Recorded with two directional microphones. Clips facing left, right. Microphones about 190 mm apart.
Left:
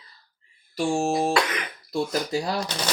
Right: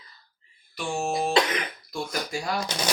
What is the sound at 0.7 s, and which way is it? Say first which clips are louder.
Speech: left 5 dB; 40° left (ahead or behind).